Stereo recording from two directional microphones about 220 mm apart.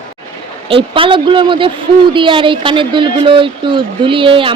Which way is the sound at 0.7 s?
25° right (ahead or behind).